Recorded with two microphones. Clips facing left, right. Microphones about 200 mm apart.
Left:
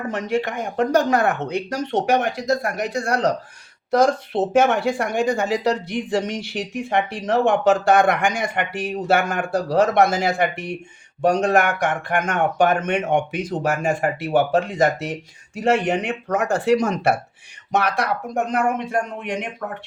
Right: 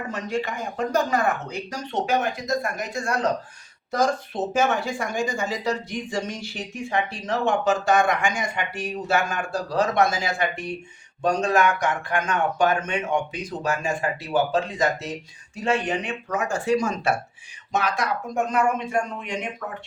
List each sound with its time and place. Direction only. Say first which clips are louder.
0.1 s speech: left 5 dB; 60° left (ahead or behind)
4.6 s speech: left 5 dB; 60° left (ahead or behind)
15.7 s speech: left 4 dB; 55° left (ahead or behind)